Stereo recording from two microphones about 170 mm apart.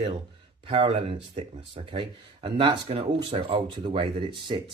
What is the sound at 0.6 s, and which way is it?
Speech, 30° right (ahead or behind).